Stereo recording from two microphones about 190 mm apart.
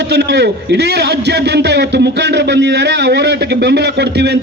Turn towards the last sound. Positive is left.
turn(degrees=-60)  # may be behind; listen again after turning